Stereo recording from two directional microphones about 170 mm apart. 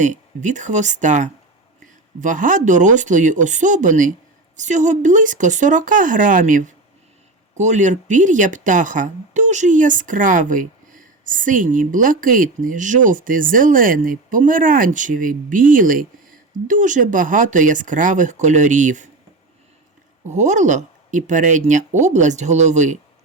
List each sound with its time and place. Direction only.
0.0 s speech: 45° right (ahead or behind)
20.2 s speech: 45° right (ahead or behind)